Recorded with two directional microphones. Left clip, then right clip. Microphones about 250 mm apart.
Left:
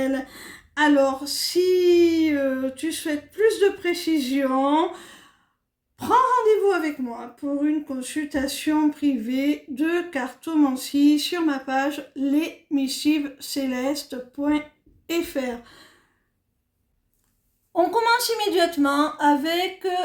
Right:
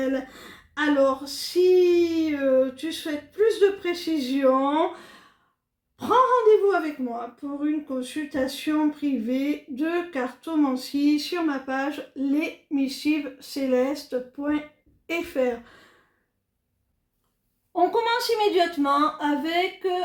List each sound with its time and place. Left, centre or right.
0.0 s a sound: left
1.9 s speech: left
6.0 s speech: left
17.7 s speech: left